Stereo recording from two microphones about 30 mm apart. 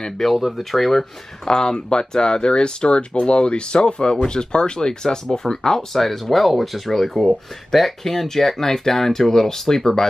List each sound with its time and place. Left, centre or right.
0.2 s speech: centre
1.4 s speech: left
5.9 s speech: centre